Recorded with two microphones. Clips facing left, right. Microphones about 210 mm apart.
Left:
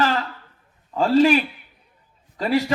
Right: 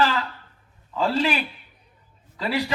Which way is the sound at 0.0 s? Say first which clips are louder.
Left 1 dB; 45° left (ahead or behind).